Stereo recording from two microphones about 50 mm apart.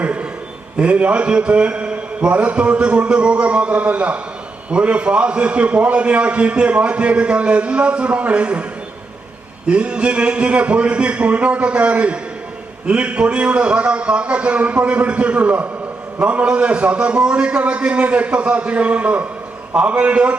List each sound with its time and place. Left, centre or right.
0.0 s a sound: right
0.8 s a man's voice: right
9.6 s a man's voice: right